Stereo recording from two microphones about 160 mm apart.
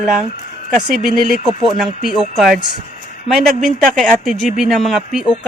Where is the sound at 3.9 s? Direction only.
5° left (ahead or behind).